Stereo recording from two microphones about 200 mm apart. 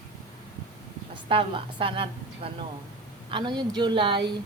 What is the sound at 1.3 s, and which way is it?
A woman's voice, 25° right (ahead or behind).